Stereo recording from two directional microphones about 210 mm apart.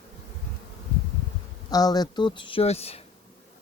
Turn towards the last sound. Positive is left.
turn(degrees=30)  # may be behind; listen again after turning